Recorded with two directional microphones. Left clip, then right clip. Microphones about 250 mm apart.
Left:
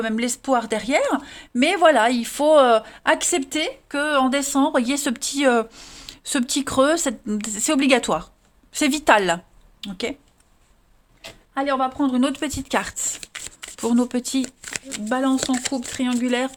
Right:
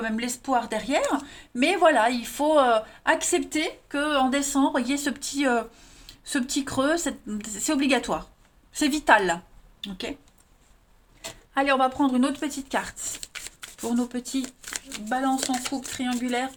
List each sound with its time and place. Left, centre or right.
0.0 s speech: left
11.5 s speech: centre
11.9 s speech: left
14.4 s speech: left
15.1 s speech: left
15.4 s speech: left
15.7 s speech: left